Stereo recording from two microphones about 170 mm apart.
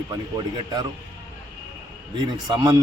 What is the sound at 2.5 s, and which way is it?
Speech, 25° right (ahead or behind).